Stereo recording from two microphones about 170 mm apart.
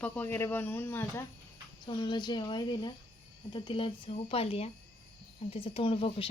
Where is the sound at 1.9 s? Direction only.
25° left (ahead or behind).